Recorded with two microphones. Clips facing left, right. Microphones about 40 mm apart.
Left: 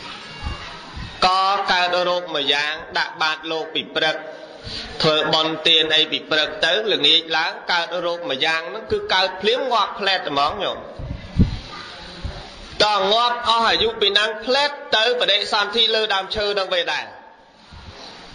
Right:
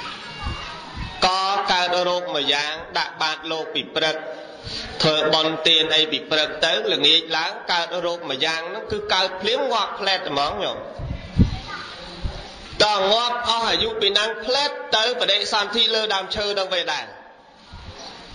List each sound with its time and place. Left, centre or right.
1.2 s mantra: centre
1.7 s a man's voice: centre
5.3 s a man's voice: centre
12.7 s a man's voice: centre
13.4 s a man's voice: centre
14.9 s speech: centre